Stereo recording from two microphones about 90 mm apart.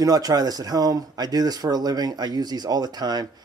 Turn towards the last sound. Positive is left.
turn(degrees=-50)  # may be behind; listen again after turning